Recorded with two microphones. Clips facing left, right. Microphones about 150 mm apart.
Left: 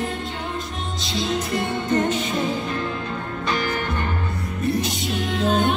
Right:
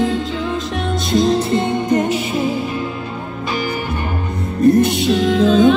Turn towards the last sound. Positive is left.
turn(degrees=-90)